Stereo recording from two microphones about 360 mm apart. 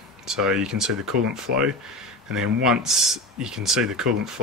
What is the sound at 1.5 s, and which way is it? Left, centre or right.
Speech, right.